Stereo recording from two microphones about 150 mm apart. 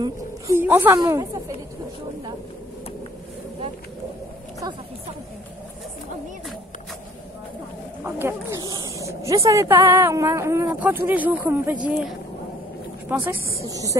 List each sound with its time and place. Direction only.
0.6 s a woman's voice: 15° right (ahead or behind)
8.0 s speech: 15° right (ahead or behind)
13.7 s a woman's voice: 25° right (ahead or behind)